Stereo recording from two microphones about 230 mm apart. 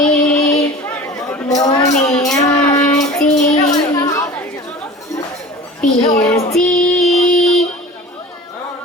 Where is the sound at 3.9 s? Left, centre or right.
Centre.